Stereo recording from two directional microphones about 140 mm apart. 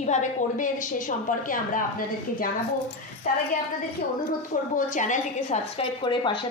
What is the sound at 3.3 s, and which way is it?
Speech, 65° left (ahead or behind).